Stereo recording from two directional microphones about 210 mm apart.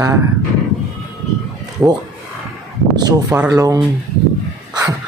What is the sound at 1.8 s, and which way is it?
Speech, 10° right (ahead or behind).